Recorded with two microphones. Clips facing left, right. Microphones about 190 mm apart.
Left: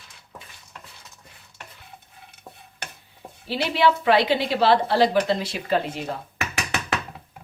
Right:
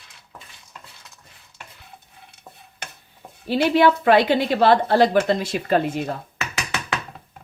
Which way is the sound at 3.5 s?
50° right (ahead or behind).